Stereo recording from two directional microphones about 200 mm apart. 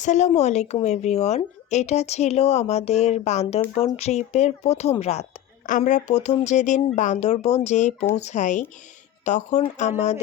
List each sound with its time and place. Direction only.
0.0 s a woman's voice: 35° left (ahead or behind)